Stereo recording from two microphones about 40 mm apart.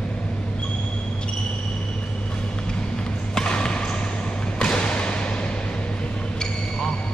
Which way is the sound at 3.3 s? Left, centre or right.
Left.